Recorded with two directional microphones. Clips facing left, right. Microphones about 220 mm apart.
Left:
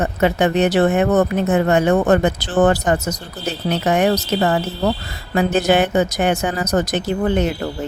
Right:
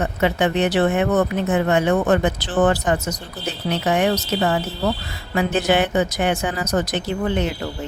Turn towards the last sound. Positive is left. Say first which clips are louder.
# left 4 dB
turn(degrees=45)  # may be behind; listen again after turning